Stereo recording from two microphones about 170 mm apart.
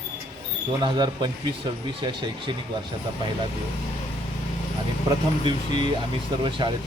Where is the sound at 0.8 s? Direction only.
25° right (ahead or behind).